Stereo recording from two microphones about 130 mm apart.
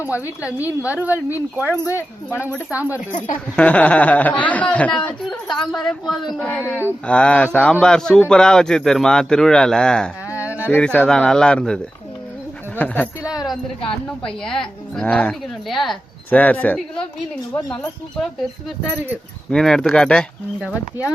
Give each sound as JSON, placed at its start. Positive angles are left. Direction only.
{"t": 0.0, "sound": "a woman's voice", "side_deg": -15}
{"t": 1.8, "sound": "speech", "side_deg": 20}
{"t": 2.5, "sound": "a woman's voice", "side_deg": -15}
{"t": 3.5, "sound": "speech", "side_deg": 10}
{"t": 6.6, "sound": "a woman's voice", "side_deg": -15}
{"t": 7.1, "sound": "a man's voice", "side_deg": 10}
{"t": 10.3, "sound": "a sound", "side_deg": -10}
{"t": 10.7, "sound": "speech", "side_deg": 10}
{"t": 14.3, "sound": "a man's voice", "side_deg": 5}
{"t": 16.3, "sound": "speech", "side_deg": 10}
{"t": 19.5, "sound": "speech", "side_deg": 5}